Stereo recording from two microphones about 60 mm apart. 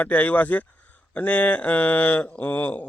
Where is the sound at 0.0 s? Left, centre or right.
Left.